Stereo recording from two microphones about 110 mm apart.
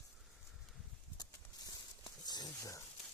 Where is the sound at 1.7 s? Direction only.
40° left (ahead or behind).